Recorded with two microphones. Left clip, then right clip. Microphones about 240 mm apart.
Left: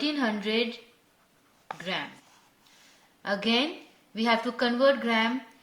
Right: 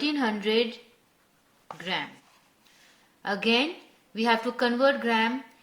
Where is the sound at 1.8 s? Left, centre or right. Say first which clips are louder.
Right 2 dB; right.